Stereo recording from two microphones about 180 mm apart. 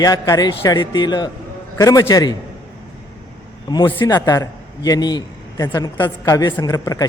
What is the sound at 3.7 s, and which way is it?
A man's voice, 25° left (ahead or behind).